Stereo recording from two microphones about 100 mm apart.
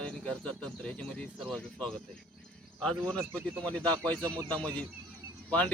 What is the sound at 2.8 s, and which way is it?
Speech, 10° left (ahead or behind).